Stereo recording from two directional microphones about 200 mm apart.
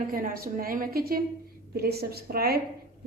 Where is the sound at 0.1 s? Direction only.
45° right (ahead or behind).